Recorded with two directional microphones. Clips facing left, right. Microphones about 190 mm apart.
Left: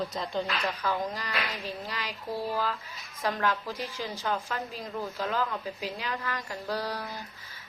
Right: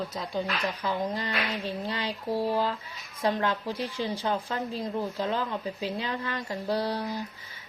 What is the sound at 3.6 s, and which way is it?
A woman's voice, 30° right (ahead or behind).